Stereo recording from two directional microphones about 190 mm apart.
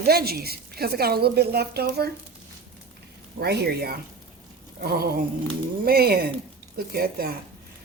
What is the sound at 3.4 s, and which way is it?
A woman's voice, 60° right (ahead or behind).